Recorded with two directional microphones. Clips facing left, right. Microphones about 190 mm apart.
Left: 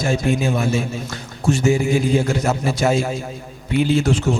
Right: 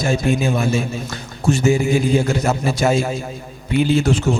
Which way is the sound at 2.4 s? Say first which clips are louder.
Right 1 dB; 25° right (ahead or behind).